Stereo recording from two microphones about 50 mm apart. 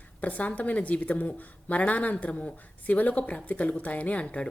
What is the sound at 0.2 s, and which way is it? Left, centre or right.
A woman's voice, left.